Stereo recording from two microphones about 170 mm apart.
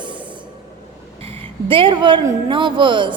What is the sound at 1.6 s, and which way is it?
A woman's voice, 30° right (ahead or behind).